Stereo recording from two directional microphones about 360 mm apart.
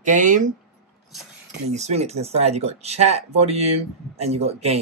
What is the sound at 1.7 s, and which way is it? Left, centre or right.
Speech, centre.